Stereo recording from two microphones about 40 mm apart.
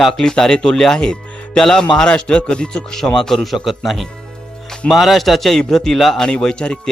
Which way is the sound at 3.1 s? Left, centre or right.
Centre.